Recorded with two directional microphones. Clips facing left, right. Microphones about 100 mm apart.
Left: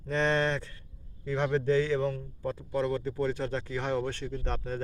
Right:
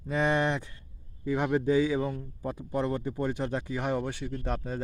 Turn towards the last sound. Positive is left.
turn(degrees=-10)  # may be behind; listen again after turning